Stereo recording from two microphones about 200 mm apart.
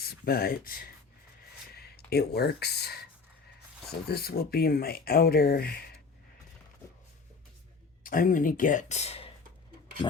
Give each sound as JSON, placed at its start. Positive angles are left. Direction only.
{"t": 0.0, "sound": "speech", "side_deg": 50}
{"t": 4.1, "sound": "speech", "side_deg": 50}
{"t": 8.0, "sound": "speech", "side_deg": 45}